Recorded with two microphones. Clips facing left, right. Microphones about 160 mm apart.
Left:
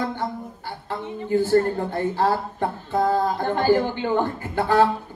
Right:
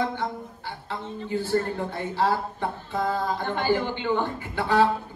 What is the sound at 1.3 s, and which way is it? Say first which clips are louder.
Speech: left 7 dB; 45° left (ahead or behind).